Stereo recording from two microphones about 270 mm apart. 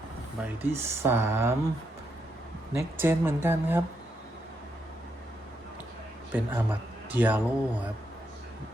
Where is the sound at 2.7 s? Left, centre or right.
Centre.